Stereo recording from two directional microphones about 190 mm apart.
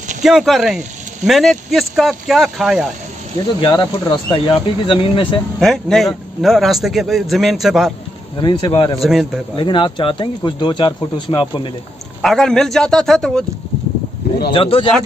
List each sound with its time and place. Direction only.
0.2 s speech: centre (ahead or behind)
3.6 s speech: 25° left (ahead or behind)
5.6 s speech: centre (ahead or behind)
8.4 s speech: 25° left (ahead or behind)
9.0 s speech: 5° right (ahead or behind)
9.6 s speech: 25° left (ahead or behind)
12.2 s speech: centre (ahead or behind)
14.5 s speech: 30° left (ahead or behind)